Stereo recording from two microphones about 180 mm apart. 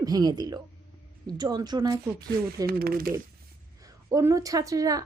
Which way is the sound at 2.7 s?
55° right (ahead or behind).